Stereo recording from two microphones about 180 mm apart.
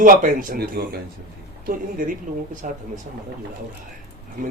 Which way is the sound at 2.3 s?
45° right (ahead or behind).